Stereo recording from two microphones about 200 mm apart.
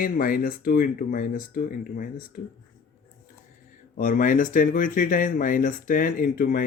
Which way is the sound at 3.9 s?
40° left (ahead or behind).